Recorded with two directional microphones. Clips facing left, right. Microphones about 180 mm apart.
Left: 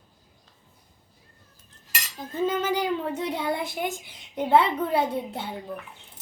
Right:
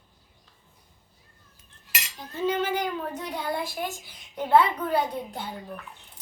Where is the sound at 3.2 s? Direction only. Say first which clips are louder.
Left 3 dB; 25° left (ahead or behind).